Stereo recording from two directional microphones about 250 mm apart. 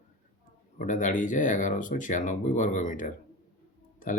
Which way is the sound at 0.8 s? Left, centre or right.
Left.